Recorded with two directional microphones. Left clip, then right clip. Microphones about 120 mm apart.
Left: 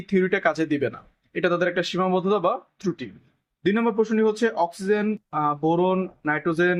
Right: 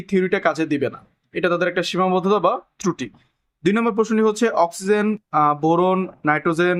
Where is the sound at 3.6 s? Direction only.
50° right (ahead or behind); by 6.8 s 35° right (ahead or behind).